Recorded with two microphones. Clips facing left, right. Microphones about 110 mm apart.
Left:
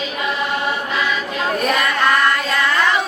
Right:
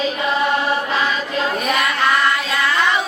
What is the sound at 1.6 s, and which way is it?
Music, centre (ahead or behind).